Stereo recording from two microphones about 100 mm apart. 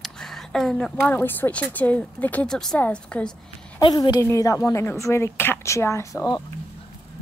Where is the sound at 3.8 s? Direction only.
45° left (ahead or behind).